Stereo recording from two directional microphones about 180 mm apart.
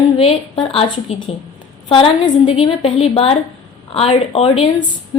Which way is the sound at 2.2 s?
35° left (ahead or behind).